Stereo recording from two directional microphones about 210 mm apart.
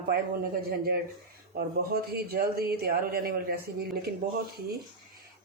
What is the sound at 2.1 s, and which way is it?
A man's voice, 45° right (ahead or behind).